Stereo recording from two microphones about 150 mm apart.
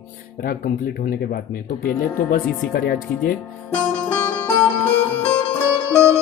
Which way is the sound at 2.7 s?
90° left.